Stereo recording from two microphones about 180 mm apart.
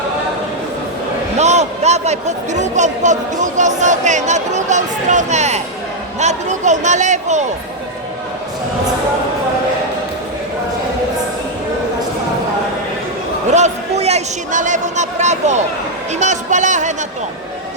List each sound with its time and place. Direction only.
1.4 s a man's voice: 40° right (ahead or behind)
13.5 s a man's voice: 40° right (ahead or behind)